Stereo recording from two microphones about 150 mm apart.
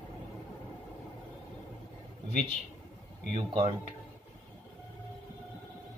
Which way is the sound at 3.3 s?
35° right (ahead or behind).